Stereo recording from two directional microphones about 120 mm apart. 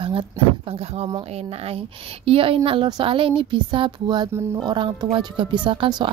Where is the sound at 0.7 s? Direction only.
60° right (ahead or behind).